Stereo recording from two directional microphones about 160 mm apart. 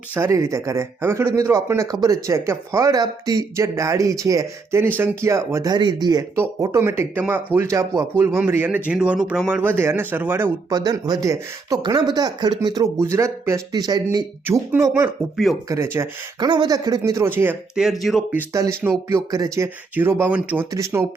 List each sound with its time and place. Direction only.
0.1 s speech: 15° right (ahead or behind)
17.8 s speech: centre (ahead or behind)
18.8 s speech: 15° right (ahead or behind)